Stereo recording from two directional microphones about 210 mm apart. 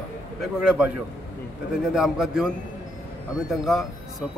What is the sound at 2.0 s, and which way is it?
Speech, centre (ahead or behind).